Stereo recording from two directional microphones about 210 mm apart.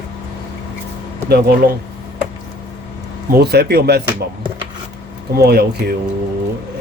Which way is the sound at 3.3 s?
50° right (ahead or behind).